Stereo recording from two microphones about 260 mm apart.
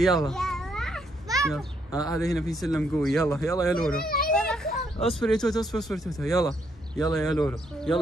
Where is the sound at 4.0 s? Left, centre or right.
Left.